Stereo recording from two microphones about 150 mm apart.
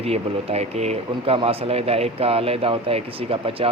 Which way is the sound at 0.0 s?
45° right (ahead or behind).